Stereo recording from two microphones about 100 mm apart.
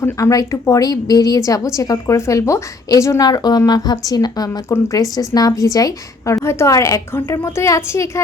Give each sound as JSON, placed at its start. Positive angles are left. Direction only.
{"t": 0.0, "sound": "a woman's voice", "side_deg": 35}